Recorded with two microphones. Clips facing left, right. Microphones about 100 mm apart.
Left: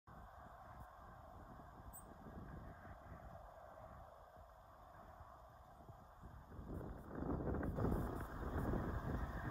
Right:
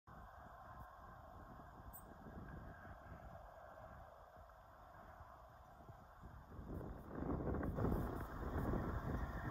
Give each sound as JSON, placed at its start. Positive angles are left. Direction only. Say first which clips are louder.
{"t": 2.4, "sound": "vehicle", "louder": "even", "side_deg": -45}
{"t": 7.1, "sound": "a sound", "louder": "even", "side_deg": 15}
{"t": 7.5, "sound": "wind noise", "louder": "even", "side_deg": 5}